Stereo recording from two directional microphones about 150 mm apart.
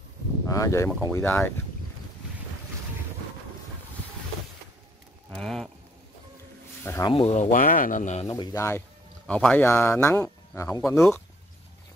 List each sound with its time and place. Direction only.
0.5 s speech: 20° left (ahead or behind)
5.3 s livestock: centre (ahead or behind)
6.8 s a sound: 15° left (ahead or behind)
7.1 s speech: 45° left (ahead or behind)
7.5 s speech: 65° left (ahead or behind)
8.3 s speech: 25° left (ahead or behind)
9.3 s speech: 10° left (ahead or behind)